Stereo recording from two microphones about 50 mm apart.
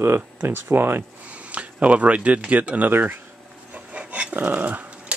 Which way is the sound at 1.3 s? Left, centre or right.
Right.